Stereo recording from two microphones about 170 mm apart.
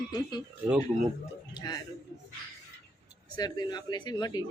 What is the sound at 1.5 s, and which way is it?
Speech, 25° left (ahead or behind).